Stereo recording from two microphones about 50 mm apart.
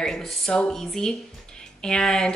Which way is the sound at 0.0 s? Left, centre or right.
Centre.